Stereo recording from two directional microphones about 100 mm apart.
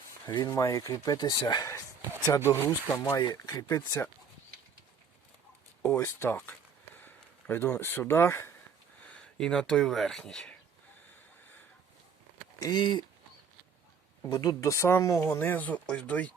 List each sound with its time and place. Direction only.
0.5 s speech: 30° left (ahead or behind)
2.3 s speech: 25° left (ahead or behind)
3.0 s speech: 40° left (ahead or behind)
5.8 s speech: 25° left (ahead or behind)
9.0 s speech: 10° left (ahead or behind)
12.5 s speech: 40° left (ahead or behind)
14.3 s speech: 35° left (ahead or behind); by 16.3 s 15° left (ahead or behind)